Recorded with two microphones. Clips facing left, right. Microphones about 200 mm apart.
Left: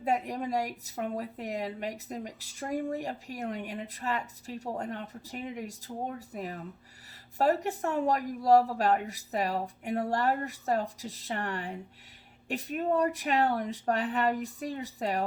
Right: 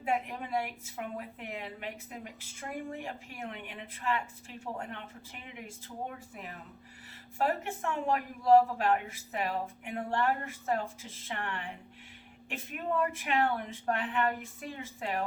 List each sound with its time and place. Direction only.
0.0 s speech: 40° left (ahead or behind)